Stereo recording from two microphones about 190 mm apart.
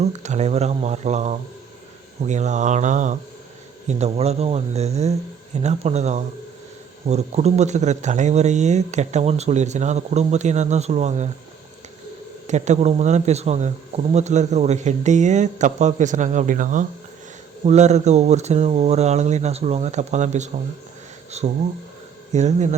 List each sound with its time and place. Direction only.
0.0 s a man's voice: 35° right (ahead or behind)
12.5 s a man's voice: 40° right (ahead or behind)